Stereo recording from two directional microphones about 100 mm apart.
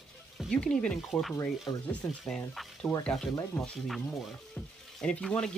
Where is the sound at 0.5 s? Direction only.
10° left (ahead or behind).